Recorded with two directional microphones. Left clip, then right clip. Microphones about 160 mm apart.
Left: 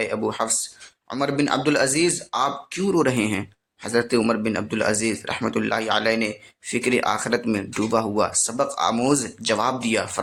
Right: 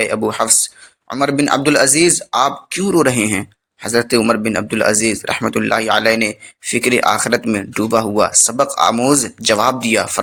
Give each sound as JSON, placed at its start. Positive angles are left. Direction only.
{"t": 0.0, "sound": "speech", "side_deg": -25}